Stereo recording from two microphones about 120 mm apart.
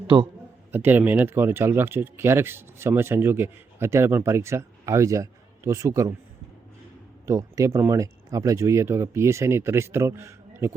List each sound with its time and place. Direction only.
0.7 s speech: 15° right (ahead or behind)
7.3 s speech: 25° right (ahead or behind)